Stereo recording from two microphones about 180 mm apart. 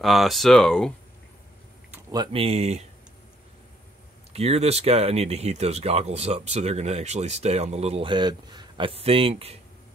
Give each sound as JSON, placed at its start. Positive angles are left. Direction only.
{"t": 0.0, "sound": "speech", "side_deg": 0}
{"t": 2.0, "sound": "speech", "side_deg": -20}
{"t": 2.4, "sound": "speech", "side_deg": -35}
{"t": 4.3, "sound": "speech", "side_deg": -35}